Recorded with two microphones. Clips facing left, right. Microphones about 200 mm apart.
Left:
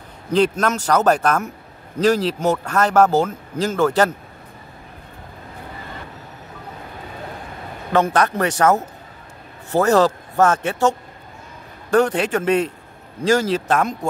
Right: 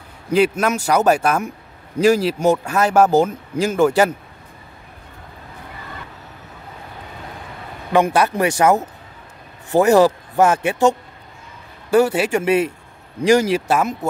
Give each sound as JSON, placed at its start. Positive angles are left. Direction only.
{"t": 0.3, "sound": "speech", "side_deg": -10}
{"t": 7.9, "sound": "speech", "side_deg": -10}